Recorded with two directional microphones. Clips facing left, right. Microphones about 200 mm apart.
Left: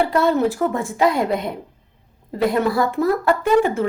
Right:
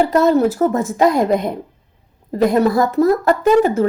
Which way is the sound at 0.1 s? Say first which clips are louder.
Right 4 dB; 40° right (ahead or behind).